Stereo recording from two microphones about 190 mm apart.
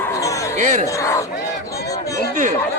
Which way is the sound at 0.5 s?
40° right (ahead or behind).